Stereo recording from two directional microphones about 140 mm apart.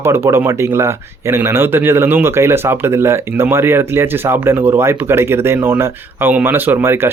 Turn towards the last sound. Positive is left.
turn(degrees=-15)  # may be behind; listen again after turning